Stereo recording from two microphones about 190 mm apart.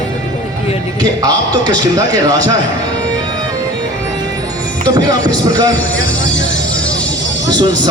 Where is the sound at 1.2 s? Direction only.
20° right (ahead or behind).